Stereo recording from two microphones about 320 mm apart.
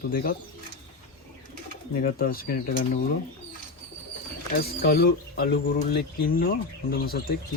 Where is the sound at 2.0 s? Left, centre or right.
Left.